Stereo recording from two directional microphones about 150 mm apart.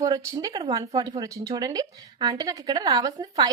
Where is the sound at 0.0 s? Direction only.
25° right (ahead or behind).